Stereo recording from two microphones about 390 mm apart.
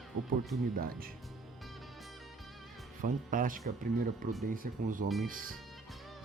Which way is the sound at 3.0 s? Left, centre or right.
Centre.